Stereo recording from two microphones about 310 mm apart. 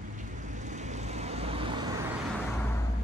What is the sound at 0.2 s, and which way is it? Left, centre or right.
Vehicle, right.